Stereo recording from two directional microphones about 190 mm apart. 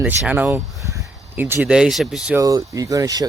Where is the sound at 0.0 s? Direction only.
5° right (ahead or behind).